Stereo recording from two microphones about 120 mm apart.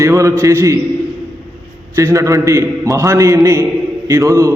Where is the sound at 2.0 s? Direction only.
25° right (ahead or behind).